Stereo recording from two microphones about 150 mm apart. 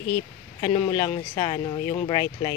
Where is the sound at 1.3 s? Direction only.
30° left (ahead or behind).